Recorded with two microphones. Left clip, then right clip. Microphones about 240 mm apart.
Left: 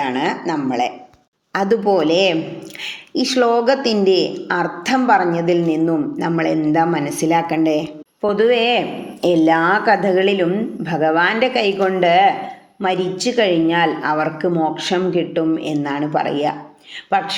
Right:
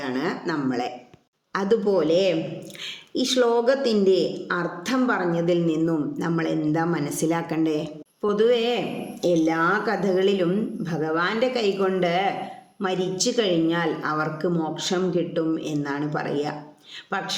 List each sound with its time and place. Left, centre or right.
0.0 s a woman's voice: centre